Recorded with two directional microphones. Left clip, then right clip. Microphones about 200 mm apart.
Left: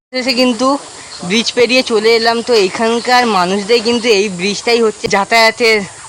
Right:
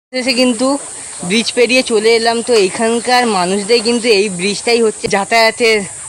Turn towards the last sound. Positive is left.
turn(degrees=-5)  # may be behind; listen again after turning